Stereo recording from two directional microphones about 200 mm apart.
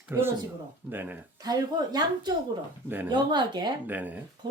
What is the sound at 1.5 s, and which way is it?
Speech, 20° right (ahead or behind).